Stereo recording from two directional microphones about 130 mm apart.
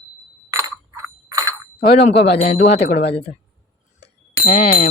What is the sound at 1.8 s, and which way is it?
Bicycle bell, 50° left (ahead or behind).